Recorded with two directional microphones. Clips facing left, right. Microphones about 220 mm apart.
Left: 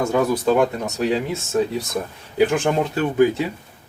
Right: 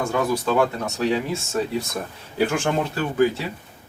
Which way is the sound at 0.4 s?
15° left (ahead or behind).